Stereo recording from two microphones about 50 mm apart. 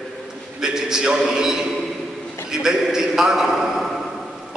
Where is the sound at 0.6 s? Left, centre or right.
Centre.